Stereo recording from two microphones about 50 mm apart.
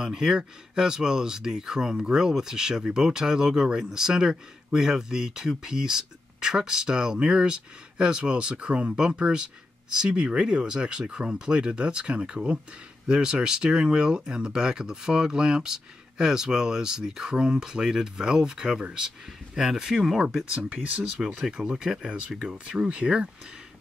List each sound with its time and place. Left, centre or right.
0.0 s speech: centre
20.5 s speech: right
21.6 s speech: centre